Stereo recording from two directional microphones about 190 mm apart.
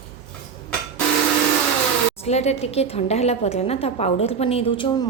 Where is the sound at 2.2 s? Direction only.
35° left (ahead or behind).